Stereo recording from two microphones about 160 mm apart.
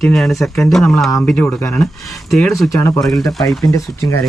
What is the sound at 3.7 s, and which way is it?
Speech, 20° left (ahead or behind).